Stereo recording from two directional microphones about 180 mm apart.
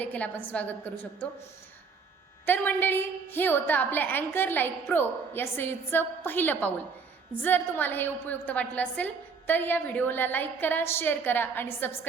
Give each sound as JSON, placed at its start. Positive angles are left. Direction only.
{"t": 0.0, "sound": "a woman's voice", "side_deg": 10}
{"t": 2.5, "sound": "a woman's voice", "side_deg": 10}